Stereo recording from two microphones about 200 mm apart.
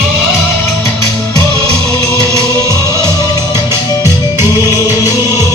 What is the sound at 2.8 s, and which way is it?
Music, 20° left (ahead or behind).